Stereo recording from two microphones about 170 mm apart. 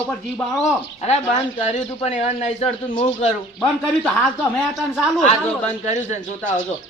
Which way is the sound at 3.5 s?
10° left (ahead or behind).